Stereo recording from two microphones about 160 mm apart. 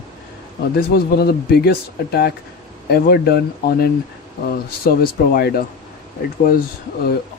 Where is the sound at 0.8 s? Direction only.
75° left (ahead or behind).